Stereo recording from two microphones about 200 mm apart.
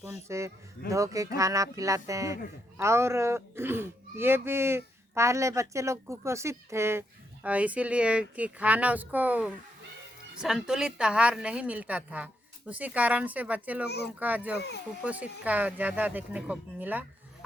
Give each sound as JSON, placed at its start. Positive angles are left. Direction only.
{"t": 0.0, "sound": "speech", "side_deg": -15}